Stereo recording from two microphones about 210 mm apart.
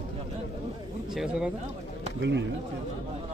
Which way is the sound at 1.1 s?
5° right (ahead or behind).